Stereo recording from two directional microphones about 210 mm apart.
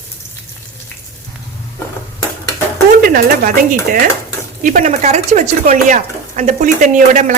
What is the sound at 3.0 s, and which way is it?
Speech, 45° right (ahead or behind).